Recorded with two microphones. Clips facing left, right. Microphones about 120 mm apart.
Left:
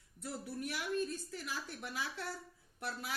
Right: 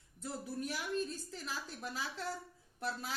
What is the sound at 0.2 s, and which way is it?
Speech, 30° right (ahead or behind).